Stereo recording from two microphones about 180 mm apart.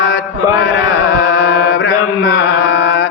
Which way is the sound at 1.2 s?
90° left.